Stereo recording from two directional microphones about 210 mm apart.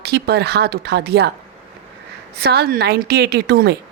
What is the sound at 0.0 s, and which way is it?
A woman's voice, 50° right (ahead or behind).